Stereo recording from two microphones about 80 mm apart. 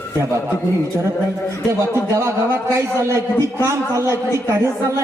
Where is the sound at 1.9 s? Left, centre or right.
Right.